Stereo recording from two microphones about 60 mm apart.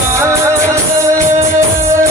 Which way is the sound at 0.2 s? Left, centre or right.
Right.